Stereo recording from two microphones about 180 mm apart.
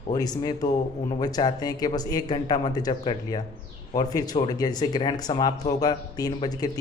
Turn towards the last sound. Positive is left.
turn(degrees=20)  # may be behind; listen again after turning